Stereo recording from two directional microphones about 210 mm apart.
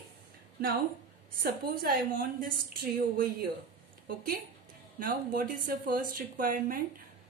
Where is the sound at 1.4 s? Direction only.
45° right (ahead or behind).